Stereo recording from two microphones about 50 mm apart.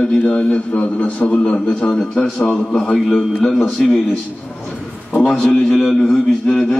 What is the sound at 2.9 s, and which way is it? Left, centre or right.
A man's voice, centre.